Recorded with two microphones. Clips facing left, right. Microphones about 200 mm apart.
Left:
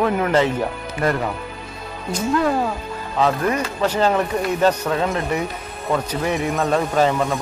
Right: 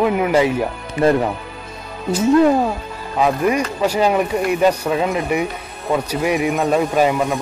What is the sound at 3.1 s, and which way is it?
Speech, 10° right (ahead or behind).